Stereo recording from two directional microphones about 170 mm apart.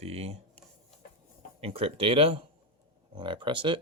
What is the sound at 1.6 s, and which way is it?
Speech, 35° right (ahead or behind).